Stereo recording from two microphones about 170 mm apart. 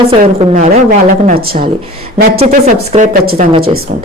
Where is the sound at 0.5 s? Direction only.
60° right (ahead or behind).